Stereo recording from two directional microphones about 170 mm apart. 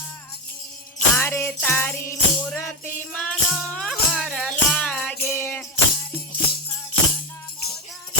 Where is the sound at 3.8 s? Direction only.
5° left (ahead or behind).